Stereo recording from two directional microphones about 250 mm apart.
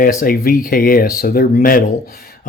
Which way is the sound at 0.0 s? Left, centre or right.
Left.